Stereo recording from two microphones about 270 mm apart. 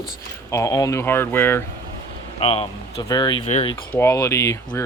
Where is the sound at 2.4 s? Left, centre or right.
Left.